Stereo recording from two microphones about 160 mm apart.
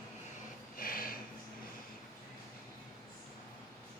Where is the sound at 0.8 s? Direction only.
65° left (ahead or behind).